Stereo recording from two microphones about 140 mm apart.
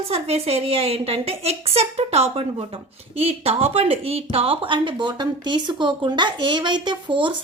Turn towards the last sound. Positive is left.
turn(degrees=-35)  # may be behind; listen again after turning